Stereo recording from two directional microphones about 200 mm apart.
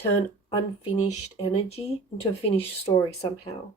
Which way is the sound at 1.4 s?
30° left (ahead or behind).